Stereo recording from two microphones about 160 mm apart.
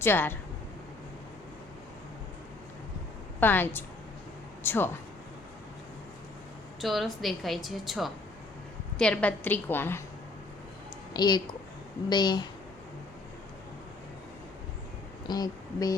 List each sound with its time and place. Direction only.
0.0 s a woman's voice: 15° left (ahead or behind)
3.4 s a woman's voice: 10° left (ahead or behind)
6.8 s a woman's voice: centre (ahead or behind)
11.1 s speech: 25° left (ahead or behind)
15.3 s speech: 25° left (ahead or behind)